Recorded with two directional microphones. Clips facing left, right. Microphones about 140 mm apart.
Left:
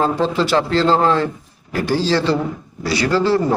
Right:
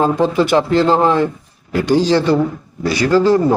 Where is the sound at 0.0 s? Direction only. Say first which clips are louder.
Right 3 dB; 15° right (ahead or behind).